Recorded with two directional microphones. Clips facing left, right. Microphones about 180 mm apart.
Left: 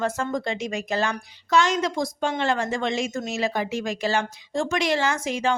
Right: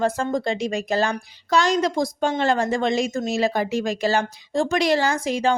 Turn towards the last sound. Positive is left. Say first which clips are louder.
# right 3 dB
turn(degrees=-35)  # may be behind; listen again after turning